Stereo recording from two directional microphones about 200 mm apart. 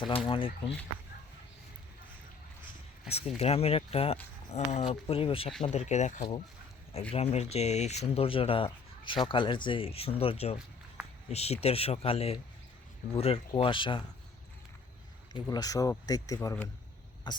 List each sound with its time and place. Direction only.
0.3 s speech: 25° left (ahead or behind)
3.1 s speech: 30° left (ahead or behind)
15.4 s speech: 20° left (ahead or behind)
17.3 s cough: 20° left (ahead or behind)